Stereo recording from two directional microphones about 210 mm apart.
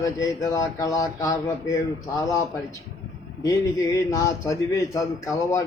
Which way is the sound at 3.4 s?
15° left (ahead or behind).